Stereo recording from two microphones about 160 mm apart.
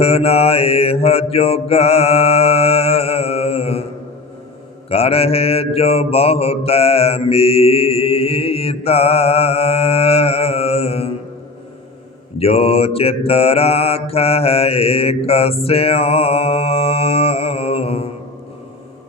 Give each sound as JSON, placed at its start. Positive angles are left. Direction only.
{"t": 0.0, "sound": "mantra", "side_deg": 40}
{"t": 4.9, "sound": "mantra", "side_deg": 40}
{"t": 12.4, "sound": "mantra", "side_deg": 40}